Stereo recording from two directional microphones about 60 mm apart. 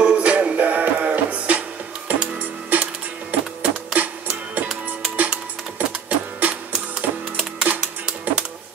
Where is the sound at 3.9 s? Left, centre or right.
Right.